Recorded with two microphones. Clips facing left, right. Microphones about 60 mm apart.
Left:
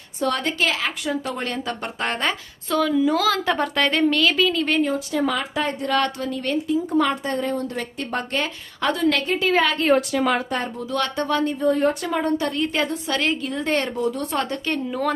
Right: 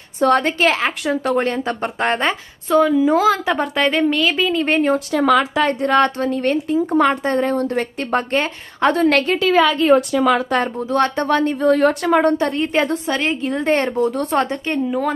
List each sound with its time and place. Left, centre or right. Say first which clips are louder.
0.2 s a woman's voice: right 7 dB; right
1.3 s a woman's voice: right 8 dB; right
3.4 s a woman's voice: right 3 dB; centre
4.6 s speech: right 3 dB; right
4.9 s a woman's voice: right 7 dB; right
5.8 s a woman's voice: right 6 dB; right
9.2 s a woman's voice: right 4 dB; right
10.8 s speech: right 6 dB; right
11.6 s a woman's voice: right 6 dB; right
12.4 s a woman's voice: right 5 dB; right
14.5 s a woman's voice: right 5 dB; right